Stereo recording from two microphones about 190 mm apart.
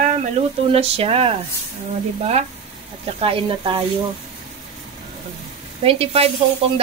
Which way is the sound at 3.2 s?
30° right (ahead or behind).